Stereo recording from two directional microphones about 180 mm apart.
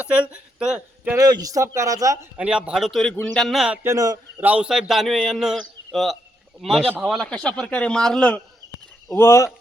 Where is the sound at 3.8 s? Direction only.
20° right (ahead or behind).